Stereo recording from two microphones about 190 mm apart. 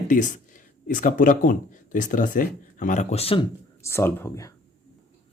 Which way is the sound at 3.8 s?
15° left (ahead or behind).